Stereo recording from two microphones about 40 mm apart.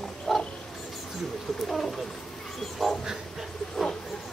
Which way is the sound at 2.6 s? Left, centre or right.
Centre.